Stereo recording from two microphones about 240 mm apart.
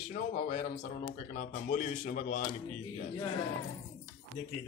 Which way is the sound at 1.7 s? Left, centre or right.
Left.